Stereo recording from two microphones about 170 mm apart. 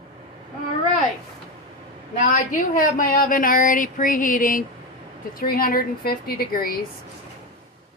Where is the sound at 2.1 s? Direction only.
50° left (ahead or behind).